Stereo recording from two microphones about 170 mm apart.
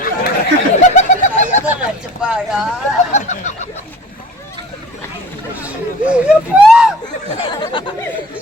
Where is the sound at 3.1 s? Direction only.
45° left (ahead or behind).